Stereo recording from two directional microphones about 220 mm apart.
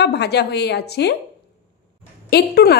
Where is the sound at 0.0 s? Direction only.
50° left (ahead or behind).